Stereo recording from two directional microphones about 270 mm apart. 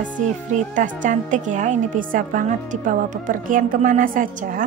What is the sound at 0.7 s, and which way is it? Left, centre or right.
A woman's voice, right.